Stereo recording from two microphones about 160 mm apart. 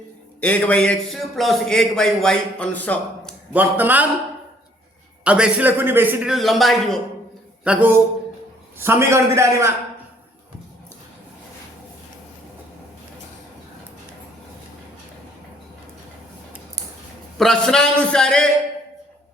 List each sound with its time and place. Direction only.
0.4 s a man's voice: 10° left (ahead or behind)
3.5 s a man's voice: 10° right (ahead or behind)
5.2 s a man's voice: 5° right (ahead or behind)
6.3 s a man's voice: centre (ahead or behind); by 9.7 s 15° right (ahead or behind)
17.3 s a man's voice: centre (ahead or behind)